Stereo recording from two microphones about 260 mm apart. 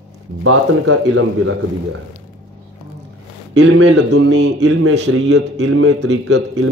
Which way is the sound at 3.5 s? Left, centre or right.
Right.